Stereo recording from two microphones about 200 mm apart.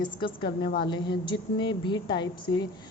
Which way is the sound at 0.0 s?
25° left (ahead or behind).